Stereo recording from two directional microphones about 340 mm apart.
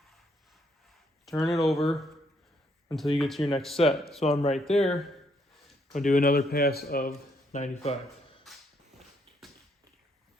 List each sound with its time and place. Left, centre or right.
1.2 s speech: centre
3.2 s speech: centre
3.8 s speech: centre
8.5 s a sound: centre